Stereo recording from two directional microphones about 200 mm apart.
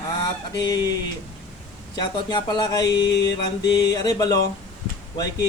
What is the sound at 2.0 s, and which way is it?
Speech, 20° left (ahead or behind).